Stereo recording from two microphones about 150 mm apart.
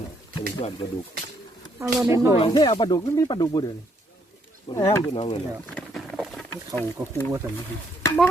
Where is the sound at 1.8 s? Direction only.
20° right (ahead or behind).